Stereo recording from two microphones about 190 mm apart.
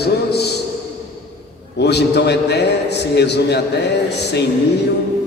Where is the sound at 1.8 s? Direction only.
60° left (ahead or behind).